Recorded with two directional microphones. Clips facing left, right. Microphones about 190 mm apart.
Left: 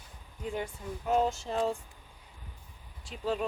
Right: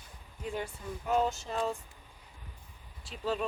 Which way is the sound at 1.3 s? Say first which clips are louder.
Left 3 dB; 30° left (ahead or behind).